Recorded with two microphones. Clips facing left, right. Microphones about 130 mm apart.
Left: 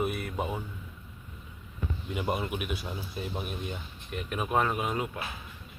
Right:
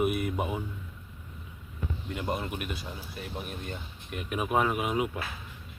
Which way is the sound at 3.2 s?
20° left (ahead or behind).